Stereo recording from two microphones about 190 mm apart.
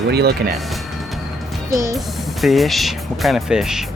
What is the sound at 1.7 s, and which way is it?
Speech, 20° right (ahead or behind).